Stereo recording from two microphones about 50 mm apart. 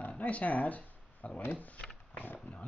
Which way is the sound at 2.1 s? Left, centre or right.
Left.